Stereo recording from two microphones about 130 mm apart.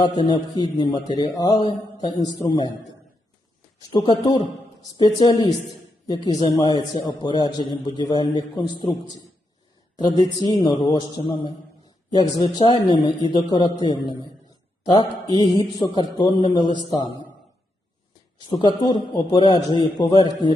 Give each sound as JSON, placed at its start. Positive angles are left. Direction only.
{"t": 0.0, "sound": "a man's voice", "side_deg": 35}
{"t": 18.3, "sound": "a man's voice", "side_deg": 35}